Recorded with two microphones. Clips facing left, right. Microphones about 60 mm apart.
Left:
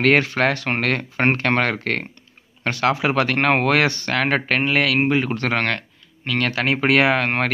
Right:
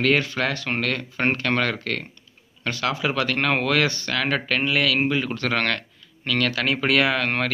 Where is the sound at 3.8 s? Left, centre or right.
Left.